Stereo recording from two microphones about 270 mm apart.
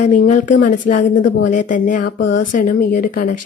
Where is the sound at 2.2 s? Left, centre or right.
Left.